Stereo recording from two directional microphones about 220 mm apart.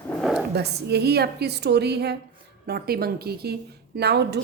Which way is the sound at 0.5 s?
50° right (ahead or behind).